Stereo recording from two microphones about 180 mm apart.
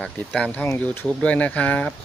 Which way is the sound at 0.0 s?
5° left (ahead or behind).